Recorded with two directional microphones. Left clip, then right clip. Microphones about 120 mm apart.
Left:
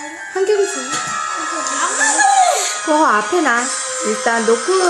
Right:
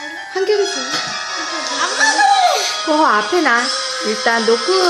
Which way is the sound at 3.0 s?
10° left (ahead or behind).